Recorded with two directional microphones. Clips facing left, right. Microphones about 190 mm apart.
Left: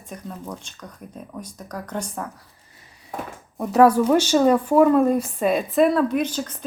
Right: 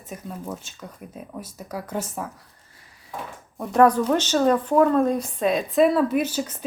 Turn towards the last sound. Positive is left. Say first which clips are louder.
# even
turn(degrees=-10)  # may be behind; listen again after turning